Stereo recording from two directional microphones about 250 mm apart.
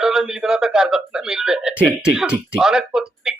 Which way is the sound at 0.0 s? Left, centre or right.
Centre.